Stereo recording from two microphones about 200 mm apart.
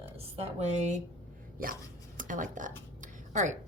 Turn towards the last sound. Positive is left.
turn(degrees=-40)  # may be behind; listen again after turning